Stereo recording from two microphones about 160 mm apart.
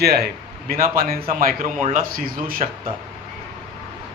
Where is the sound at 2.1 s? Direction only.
60° right (ahead or behind).